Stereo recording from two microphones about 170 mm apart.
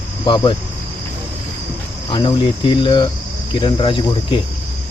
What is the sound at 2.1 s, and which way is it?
Speech, 30° left (ahead or behind).